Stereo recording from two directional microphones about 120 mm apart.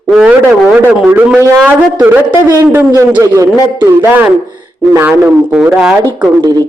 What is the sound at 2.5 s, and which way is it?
Speech, 25° right (ahead or behind).